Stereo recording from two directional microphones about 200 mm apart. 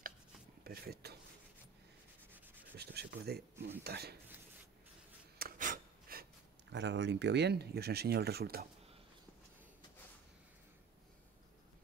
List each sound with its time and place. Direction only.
0.7 s speech: 50° right (ahead or behind)
2.3 s sanding: 10° right (ahead or behind)
2.7 s speech: 55° right (ahead or behind)
5.4 s a sound: 45° right (ahead or behind)
6.7 s speech: 60° right (ahead or behind)